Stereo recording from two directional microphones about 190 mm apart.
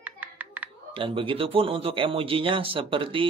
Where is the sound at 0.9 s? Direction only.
25° right (ahead or behind).